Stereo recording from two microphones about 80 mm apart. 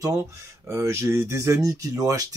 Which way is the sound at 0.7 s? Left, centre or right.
Right.